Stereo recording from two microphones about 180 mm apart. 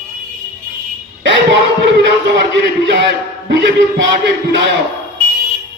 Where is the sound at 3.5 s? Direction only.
80° right.